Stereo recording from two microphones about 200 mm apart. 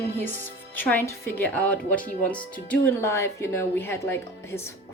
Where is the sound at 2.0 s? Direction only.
40° left (ahead or behind).